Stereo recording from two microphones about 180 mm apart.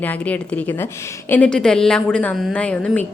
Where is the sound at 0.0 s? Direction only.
10° left (ahead or behind).